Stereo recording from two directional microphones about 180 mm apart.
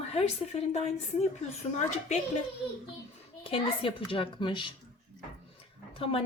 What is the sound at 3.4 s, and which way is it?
A woman's voice, 30° left (ahead or behind).